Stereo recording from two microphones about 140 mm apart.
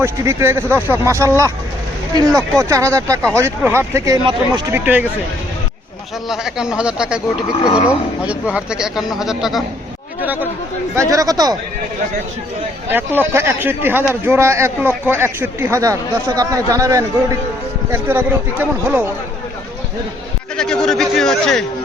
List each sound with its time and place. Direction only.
0.0 s a man's voice: 20° right (ahead or behind)
6.2 s a man's voice: 5° right (ahead or behind)
10.9 s speech: 20° right (ahead or behind)
12.9 s a man's voice: 15° right (ahead or behind)
20.6 s a man's voice: 5° left (ahead or behind)